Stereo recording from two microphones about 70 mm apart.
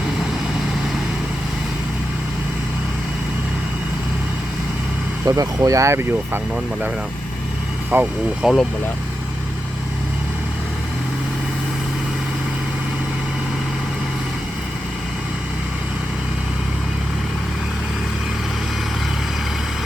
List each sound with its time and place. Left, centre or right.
5.2 s speech: right
7.9 s speech: right
8.4 s speech: centre